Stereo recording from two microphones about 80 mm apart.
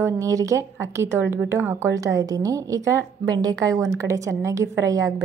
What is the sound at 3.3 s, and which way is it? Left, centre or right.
A woman's voice, right.